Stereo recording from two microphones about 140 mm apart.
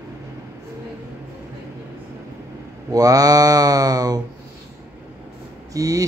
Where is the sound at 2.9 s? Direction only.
25° right (ahead or behind).